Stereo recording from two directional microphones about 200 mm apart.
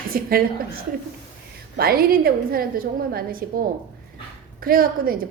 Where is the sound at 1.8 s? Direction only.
50° right (ahead or behind).